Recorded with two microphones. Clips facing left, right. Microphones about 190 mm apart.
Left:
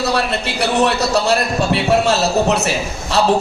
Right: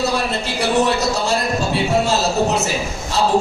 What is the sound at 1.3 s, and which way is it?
Speech, 70° left (ahead or behind).